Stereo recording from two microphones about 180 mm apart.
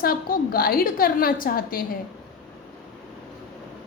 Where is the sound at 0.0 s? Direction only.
55° left (ahead or behind).